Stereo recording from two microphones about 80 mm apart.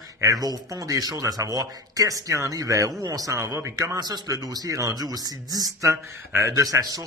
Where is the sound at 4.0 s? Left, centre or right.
Right.